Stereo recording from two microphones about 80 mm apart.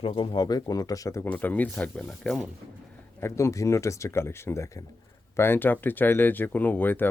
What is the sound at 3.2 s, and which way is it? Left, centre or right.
Speech, left.